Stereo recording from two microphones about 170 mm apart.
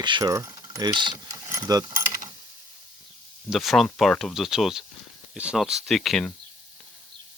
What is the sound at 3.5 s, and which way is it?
Speech, centre (ahead or behind).